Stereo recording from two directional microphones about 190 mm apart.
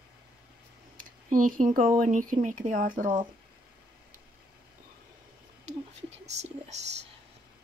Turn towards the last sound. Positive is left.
turn(degrees=-35)  # may be behind; listen again after turning